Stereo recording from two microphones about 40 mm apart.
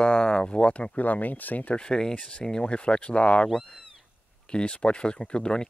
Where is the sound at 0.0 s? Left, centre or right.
Left.